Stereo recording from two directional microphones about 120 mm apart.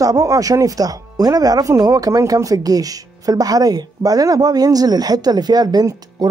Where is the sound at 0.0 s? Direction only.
30° right (ahead or behind).